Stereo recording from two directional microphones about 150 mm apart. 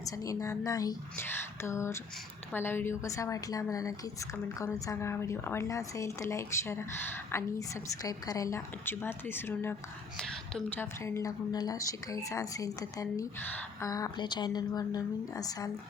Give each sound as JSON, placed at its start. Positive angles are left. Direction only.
{"t": 0.0, "sound": "a woman's voice", "side_deg": 20}
{"t": 1.1, "sound": "whispering", "side_deg": 15}
{"t": 2.5, "sound": "a woman's voice", "side_deg": 15}
{"t": 8.0, "sound": "speech", "side_deg": 25}
{"t": 10.8, "sound": "a woman's voice", "side_deg": 15}